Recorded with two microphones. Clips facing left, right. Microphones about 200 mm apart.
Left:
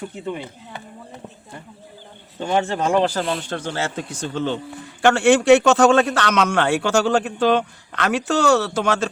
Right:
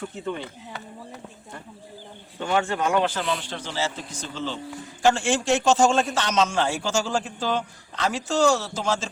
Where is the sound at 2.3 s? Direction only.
25° left (ahead or behind).